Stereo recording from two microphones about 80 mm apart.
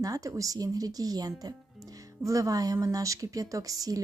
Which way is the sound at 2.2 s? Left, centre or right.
Right.